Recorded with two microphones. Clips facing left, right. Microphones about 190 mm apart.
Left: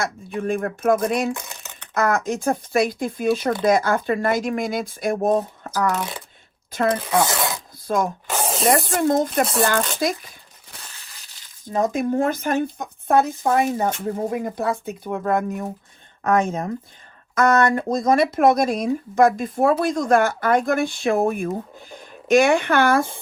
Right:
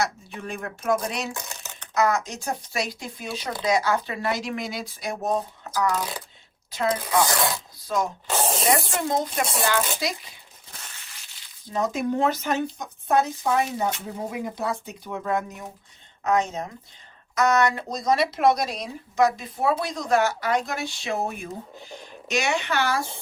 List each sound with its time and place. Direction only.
0.0 s speech: 50° left (ahead or behind)
7.2 s speech: 25° left (ahead or behind)
7.9 s speech: 55° left (ahead or behind)
8.4 s spray: centre (ahead or behind)
8.7 s speech: 50° left (ahead or behind)
11.7 s speech: 50° left (ahead or behind)